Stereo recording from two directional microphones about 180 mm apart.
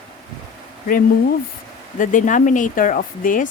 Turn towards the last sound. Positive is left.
turn(degrees=45)  # may be behind; listen again after turning